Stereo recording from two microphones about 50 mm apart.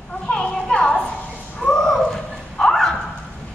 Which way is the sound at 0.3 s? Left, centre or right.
Centre.